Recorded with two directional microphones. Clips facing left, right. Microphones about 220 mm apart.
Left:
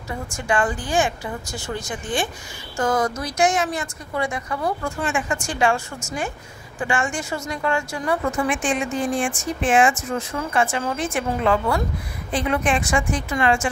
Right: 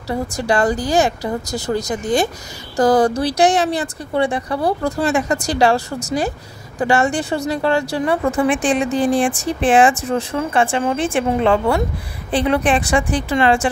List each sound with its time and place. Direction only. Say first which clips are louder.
0.1 s speech: right 6 dB; 35° right (ahead or behind)